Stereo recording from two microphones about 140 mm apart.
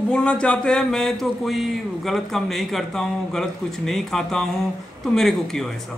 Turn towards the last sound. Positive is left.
turn(degrees=0)  # may be behind; listen again after turning